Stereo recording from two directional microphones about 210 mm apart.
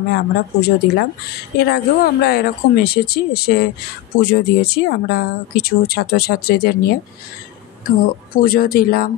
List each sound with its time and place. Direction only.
0.1 s a woman's voice: 50° left (ahead or behind)